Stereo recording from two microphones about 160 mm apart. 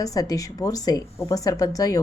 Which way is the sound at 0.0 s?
20° left (ahead or behind).